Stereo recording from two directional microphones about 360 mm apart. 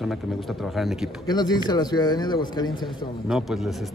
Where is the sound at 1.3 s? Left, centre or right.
Centre.